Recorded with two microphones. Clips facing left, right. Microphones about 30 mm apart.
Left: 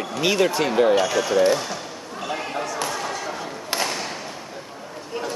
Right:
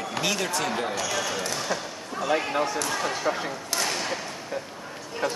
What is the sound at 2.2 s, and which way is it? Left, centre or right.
Speech, centre.